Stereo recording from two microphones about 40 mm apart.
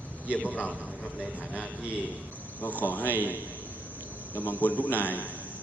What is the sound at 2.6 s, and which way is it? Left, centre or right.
Speech, left.